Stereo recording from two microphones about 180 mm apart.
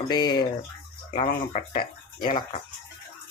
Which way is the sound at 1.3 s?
55° left (ahead or behind).